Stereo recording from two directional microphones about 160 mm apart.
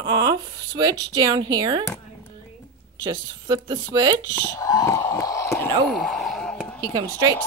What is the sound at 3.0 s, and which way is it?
A woman's voice, 25° right (ahead or behind).